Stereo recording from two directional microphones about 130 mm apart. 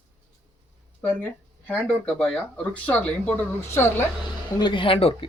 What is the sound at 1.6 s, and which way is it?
Speech, 10° left (ahead or behind).